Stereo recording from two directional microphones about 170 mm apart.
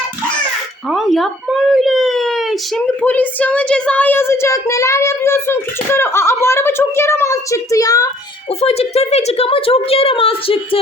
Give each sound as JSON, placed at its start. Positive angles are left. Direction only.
{"t": 0.9, "sound": "speech", "side_deg": 0}
{"t": 8.6, "sound": "a woman's voice", "side_deg": 35}